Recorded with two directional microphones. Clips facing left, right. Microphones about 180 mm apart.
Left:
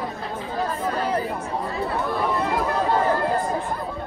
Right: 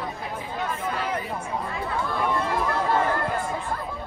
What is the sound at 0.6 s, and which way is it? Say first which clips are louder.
Chatter: left 4 dB; 35° left (ahead or behind).